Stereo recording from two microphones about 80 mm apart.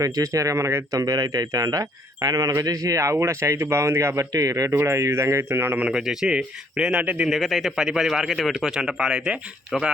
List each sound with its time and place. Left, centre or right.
0.0 s speech: right
1.0 s speech: right
5.8 s a man's voice: centre
7.3 s speech: centre